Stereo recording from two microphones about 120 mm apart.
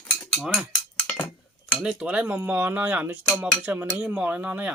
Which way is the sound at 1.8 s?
5° right (ahead or behind).